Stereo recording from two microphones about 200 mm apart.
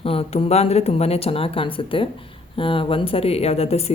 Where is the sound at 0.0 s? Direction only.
30° left (ahead or behind).